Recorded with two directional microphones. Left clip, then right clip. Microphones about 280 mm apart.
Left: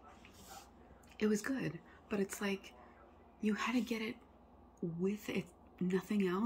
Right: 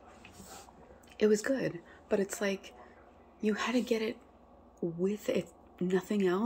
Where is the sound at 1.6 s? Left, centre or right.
Left.